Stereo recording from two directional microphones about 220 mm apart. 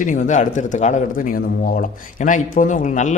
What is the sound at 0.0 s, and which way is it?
Speech, 35° left (ahead or behind).